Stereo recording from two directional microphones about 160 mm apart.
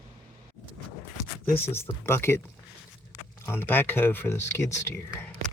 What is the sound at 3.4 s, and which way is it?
Speech, 15° left (ahead or behind).